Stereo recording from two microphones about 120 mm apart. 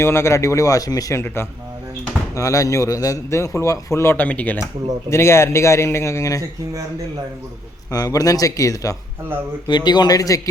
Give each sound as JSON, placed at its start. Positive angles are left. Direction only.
{"t": 0.0, "sound": "a man's voice", "side_deg": 25}
{"t": 2.3, "sound": "a man's voice", "side_deg": 25}
{"t": 5.0, "sound": "a man's voice", "side_deg": 25}
{"t": 7.9, "sound": "a man's voice", "side_deg": 30}